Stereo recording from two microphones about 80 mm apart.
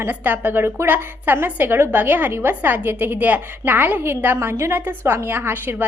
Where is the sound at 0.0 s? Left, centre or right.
Right.